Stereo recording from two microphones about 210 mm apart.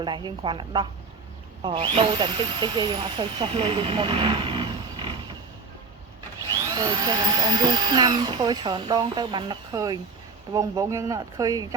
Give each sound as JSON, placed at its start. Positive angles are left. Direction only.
{"t": 0.0, "sound": "speech", "side_deg": -20}
{"t": 6.7, "sound": "speech", "side_deg": -20}